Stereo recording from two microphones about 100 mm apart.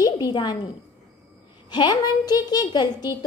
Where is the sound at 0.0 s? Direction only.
40° left (ahead or behind).